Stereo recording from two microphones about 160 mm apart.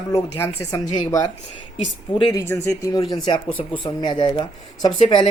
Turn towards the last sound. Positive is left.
turn(degrees=30)  # may be behind; listen again after turning